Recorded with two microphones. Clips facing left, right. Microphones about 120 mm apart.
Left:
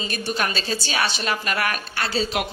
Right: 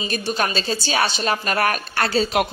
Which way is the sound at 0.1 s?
30° right (ahead or behind).